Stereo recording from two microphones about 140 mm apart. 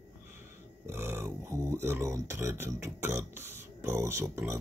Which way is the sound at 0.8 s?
15° right (ahead or behind).